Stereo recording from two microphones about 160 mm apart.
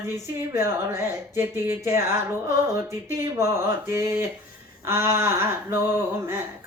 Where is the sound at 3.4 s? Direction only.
15° right (ahead or behind).